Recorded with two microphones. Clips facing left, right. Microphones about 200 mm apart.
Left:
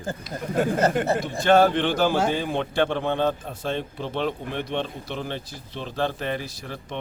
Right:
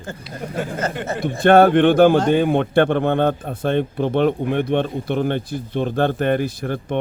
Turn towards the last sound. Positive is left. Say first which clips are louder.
# right 11 dB
turn(degrees=-55)  # may be behind; listen again after turning